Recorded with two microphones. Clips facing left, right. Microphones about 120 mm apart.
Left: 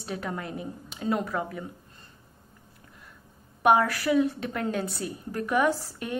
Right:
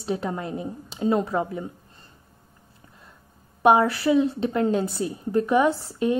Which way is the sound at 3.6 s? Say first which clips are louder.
Right 4 dB; 25° right (ahead or behind).